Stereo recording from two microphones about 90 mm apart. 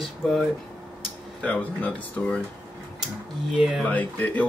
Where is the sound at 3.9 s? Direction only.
15° left (ahead or behind).